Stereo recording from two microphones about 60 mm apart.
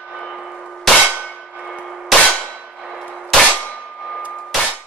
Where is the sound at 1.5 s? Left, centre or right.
Centre.